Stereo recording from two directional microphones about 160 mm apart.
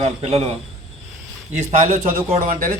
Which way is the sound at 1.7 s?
50° right (ahead or behind).